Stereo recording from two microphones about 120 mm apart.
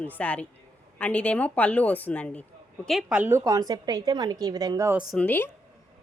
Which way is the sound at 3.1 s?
20° right (ahead or behind).